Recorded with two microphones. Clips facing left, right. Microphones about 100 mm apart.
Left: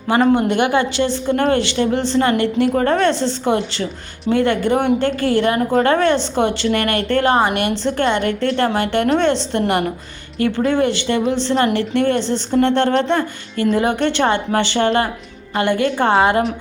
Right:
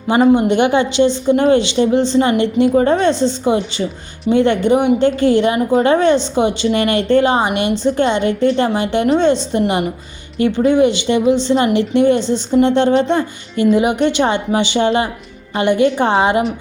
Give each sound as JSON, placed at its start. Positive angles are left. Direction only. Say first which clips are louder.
{"t": 0.2, "sound": "a woman's voice", "louder": "right 4 dB", "side_deg": -20}